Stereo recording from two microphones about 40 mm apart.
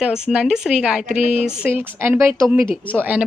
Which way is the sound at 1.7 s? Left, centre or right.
Right.